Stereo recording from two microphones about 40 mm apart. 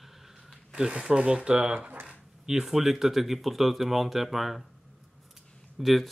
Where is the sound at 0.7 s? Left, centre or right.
Centre.